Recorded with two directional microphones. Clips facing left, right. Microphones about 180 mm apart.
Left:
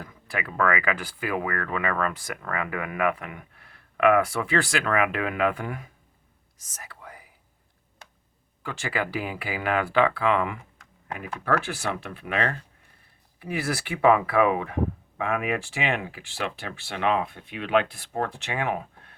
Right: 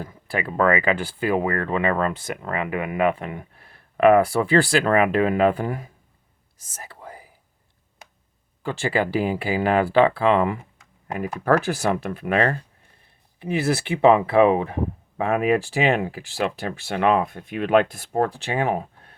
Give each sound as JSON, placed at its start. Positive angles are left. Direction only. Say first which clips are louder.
{"t": 0.0, "sound": "speech", "louder": "right 6 dB", "side_deg": -30}
{"t": 6.6, "sound": "whispering", "louder": "right 4 dB", "side_deg": -30}
{"t": 8.6, "sound": "speech", "louder": "right 7 dB", "side_deg": -30}
{"t": 13.4, "sound": "speech", "louder": "right 6 dB", "side_deg": -25}